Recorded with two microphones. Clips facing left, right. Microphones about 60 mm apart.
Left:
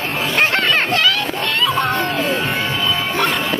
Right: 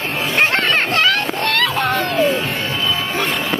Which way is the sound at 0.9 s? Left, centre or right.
Right.